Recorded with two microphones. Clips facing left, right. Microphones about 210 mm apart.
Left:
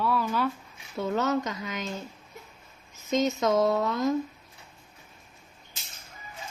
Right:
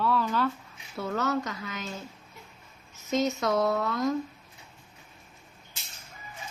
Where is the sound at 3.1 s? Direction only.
20° left (ahead or behind).